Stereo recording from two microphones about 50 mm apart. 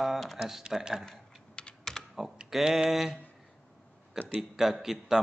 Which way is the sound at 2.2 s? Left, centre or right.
Centre.